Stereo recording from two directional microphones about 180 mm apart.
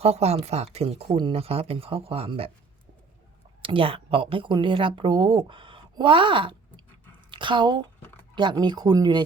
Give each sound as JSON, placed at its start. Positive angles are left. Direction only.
{"t": 0.0, "sound": "speech", "side_deg": -35}
{"t": 3.6, "sound": "speech", "side_deg": -30}